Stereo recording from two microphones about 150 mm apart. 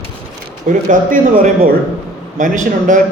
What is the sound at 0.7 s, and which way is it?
A man's voice, 60° right (ahead or behind).